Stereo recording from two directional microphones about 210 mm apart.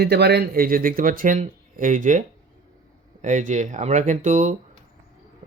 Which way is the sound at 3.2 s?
35° right (ahead or behind).